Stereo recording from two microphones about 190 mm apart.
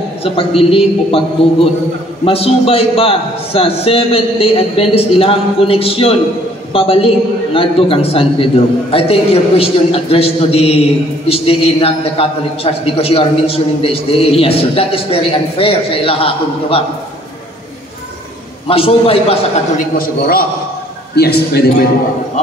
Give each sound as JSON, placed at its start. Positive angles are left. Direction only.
{"t": 0.2, "sound": "a man's voice", "side_deg": 30}
{"t": 18.7, "sound": "a man's voice", "side_deg": 30}
{"t": 20.0, "sound": "a man's voice", "side_deg": 50}